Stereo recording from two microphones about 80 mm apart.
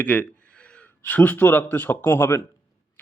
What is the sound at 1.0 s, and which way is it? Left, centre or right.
A man's voice, left.